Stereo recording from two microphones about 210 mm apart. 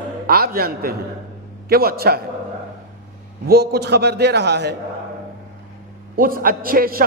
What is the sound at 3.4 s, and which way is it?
A man's voice, 50° right (ahead or behind).